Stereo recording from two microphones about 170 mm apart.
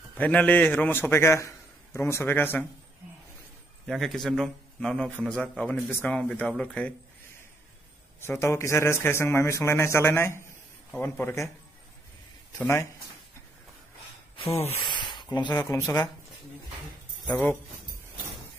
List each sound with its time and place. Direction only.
0.2 s speech: 10° left (ahead or behind)
3.8 s speech: centre (ahead or behind)
8.2 s speech: 15° left (ahead or behind)
12.5 s speech: 15° left (ahead or behind)
15.1 s speech: 25° left (ahead or behind)
17.3 s speech: 5° left (ahead or behind)